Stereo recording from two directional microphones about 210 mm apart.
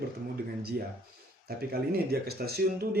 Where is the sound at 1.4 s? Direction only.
45° right (ahead or behind).